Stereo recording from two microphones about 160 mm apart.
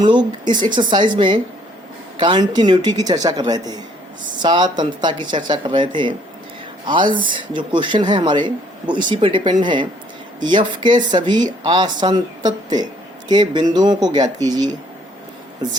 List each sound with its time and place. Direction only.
0.0 s speech: 30° right (ahead or behind)